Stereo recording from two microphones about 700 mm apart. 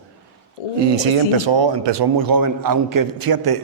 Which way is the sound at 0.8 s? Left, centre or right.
Right.